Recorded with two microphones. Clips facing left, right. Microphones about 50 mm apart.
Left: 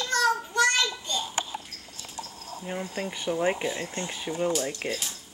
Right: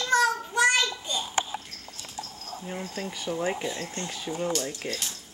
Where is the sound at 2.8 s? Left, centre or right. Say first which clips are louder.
Left 3 dB; centre.